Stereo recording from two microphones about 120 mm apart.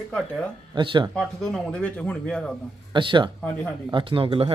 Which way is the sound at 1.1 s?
5° left (ahead or behind).